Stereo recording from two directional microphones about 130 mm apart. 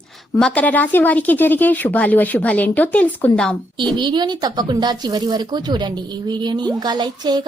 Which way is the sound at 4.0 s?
35° right (ahead or behind).